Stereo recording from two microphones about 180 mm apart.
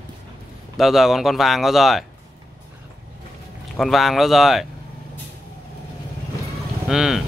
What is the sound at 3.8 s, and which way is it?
Speech, centre (ahead or behind).